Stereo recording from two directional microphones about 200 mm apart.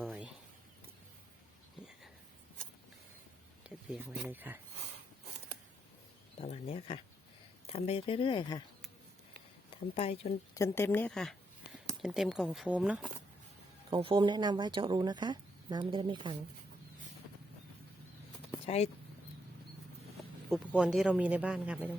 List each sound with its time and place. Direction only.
0.0 s a sound: centre (ahead or behind)
3.6 s a sound: 5° right (ahead or behind)
4.1 s speech: 10° right (ahead or behind)
6.4 s speech: 30° left (ahead or behind)
9.6 s speech: 30° left (ahead or behind)
10.5 s a woman's voice: 15° left (ahead or behind); by 13.1 s 5° right (ahead or behind)
13.9 s speech: 25° right (ahead or behind)
18.6 s speech: 30° left (ahead or behind)
20.5 s speech: 5° right (ahead or behind)